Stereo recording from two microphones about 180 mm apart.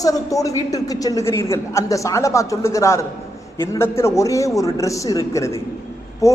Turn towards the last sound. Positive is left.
turn(degrees=15)  # may be behind; listen again after turning